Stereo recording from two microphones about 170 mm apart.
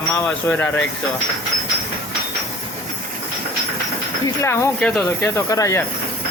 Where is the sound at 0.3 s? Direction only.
10° left (ahead or behind).